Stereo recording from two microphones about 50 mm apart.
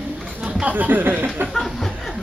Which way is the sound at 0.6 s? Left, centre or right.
Right.